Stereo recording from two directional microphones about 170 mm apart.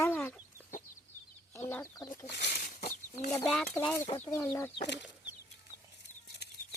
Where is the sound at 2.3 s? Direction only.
75° left (ahead or behind); by 3.2 s 60° left (ahead or behind).